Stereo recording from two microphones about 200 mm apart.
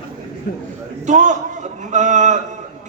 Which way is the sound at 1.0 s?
35° right (ahead or behind).